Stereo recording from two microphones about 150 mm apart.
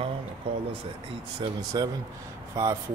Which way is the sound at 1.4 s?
35° right (ahead or behind).